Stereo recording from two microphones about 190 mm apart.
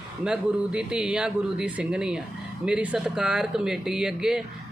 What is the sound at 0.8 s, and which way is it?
Speech, 5° right (ahead or behind).